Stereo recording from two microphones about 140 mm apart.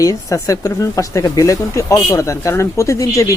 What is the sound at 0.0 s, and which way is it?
Speech, 25° left (ahead or behind).